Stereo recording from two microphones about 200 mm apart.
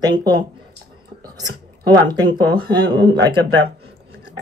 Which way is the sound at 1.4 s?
20° right (ahead or behind).